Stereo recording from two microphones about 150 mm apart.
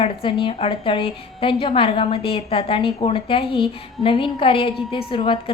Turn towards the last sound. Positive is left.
turn(degrees=35)  # may be behind; listen again after turning